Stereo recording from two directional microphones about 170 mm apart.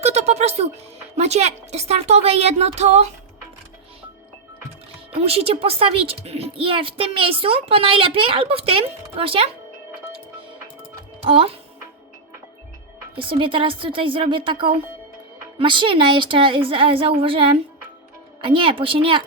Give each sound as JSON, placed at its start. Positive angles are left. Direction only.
{"t": 0.0, "sound": "speech", "side_deg": -40}
{"t": 5.1, "sound": "speech", "side_deg": -35}
{"t": 11.2, "sound": "speech", "side_deg": -35}
{"t": 13.1, "sound": "speech", "side_deg": -30}